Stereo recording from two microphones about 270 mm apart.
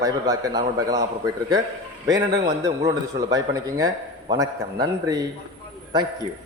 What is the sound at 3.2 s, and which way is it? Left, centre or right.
A man's voice, centre.